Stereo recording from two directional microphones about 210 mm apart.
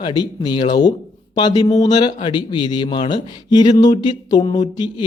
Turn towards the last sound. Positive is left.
turn(degrees=20)  # may be behind; listen again after turning